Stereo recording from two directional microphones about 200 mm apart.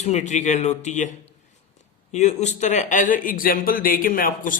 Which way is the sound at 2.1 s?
35° left (ahead or behind).